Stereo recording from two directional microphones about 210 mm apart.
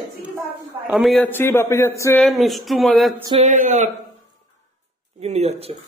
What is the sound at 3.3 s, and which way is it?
Speech, 35° right (ahead or behind).